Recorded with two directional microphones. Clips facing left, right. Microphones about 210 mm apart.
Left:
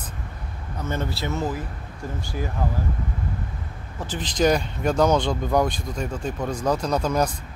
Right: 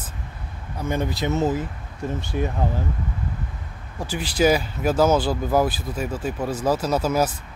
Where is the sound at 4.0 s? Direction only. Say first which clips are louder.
Right 2 dB; 10° right (ahead or behind).